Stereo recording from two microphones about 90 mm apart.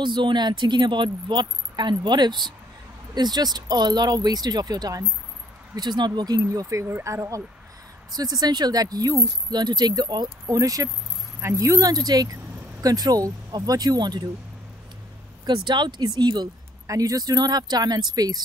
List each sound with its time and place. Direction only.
0.0 s a woman's voice: 60° right (ahead or behind); by 5.0 s 45° right (ahead or behind)
5.8 s speech: 55° right (ahead or behind); by 7.4 s 35° right (ahead or behind)
8.1 s speech: 45° right (ahead or behind)
10.4 s speech: 40° right (ahead or behind)
15.4 s a woman's voice: 55° right (ahead or behind)
16.8 s speech: 40° right (ahead or behind)